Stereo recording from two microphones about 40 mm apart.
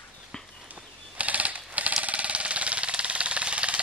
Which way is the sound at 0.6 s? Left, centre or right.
Right.